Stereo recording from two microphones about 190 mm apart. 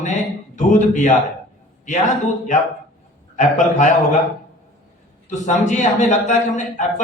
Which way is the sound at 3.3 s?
40° left (ahead or behind).